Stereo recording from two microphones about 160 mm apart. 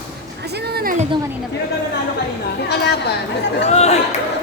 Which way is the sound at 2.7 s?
90° left.